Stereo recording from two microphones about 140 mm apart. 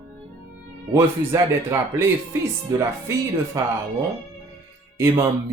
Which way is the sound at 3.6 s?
20° right (ahead or behind).